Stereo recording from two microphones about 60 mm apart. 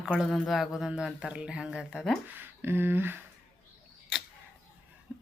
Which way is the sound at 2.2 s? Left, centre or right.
Right.